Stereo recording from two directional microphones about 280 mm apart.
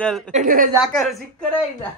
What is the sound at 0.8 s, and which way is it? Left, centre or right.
Speech, centre.